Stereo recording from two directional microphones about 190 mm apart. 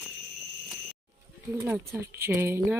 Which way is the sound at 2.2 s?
10° right (ahead or behind).